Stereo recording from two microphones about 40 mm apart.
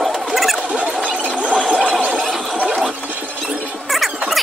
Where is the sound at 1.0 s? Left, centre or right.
Right.